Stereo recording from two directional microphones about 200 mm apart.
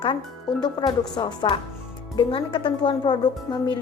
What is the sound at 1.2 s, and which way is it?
A woman's voice, 25° left (ahead or behind).